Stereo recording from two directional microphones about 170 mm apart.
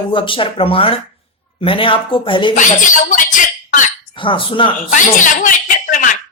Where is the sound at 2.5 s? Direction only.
50° left (ahead or behind).